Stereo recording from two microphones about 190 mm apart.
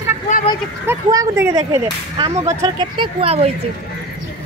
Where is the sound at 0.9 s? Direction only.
15° right (ahead or behind); by 3.5 s 30° right (ahead or behind).